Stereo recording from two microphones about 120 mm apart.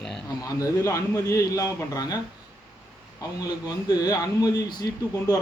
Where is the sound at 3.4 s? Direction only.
30° left (ahead or behind).